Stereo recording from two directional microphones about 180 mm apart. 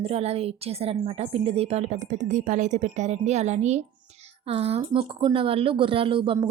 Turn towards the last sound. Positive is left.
turn(degrees=-30)  # may be behind; listen again after turning